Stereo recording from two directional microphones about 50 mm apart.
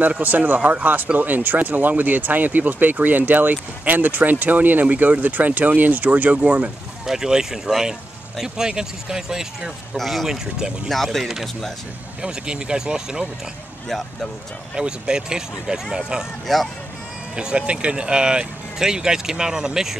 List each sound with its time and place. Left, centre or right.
0.5 s speech: right
7.1 s speech: centre
9.9 s speech: centre
10.2 s speech: centre
10.9 s speech: centre
12.2 s speech: centre
14.8 s speech: centre
16.5 s speech: centre
17.4 s speech: centre